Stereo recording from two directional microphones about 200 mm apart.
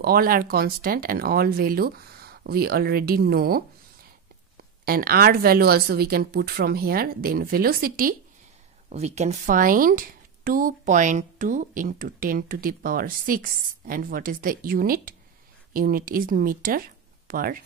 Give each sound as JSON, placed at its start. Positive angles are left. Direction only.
{"t": 0.0, "sound": "a woman's voice", "side_deg": -50}
{"t": 8.8, "sound": "a woman's voice", "side_deg": -35}